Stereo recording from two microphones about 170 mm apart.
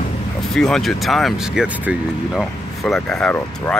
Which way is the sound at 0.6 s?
Centre (ahead or behind).